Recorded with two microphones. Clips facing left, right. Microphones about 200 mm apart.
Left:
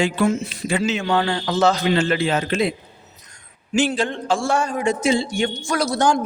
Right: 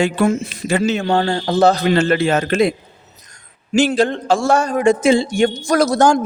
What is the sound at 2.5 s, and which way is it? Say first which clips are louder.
Speech: right 5 dB; 70° right (ahead or behind).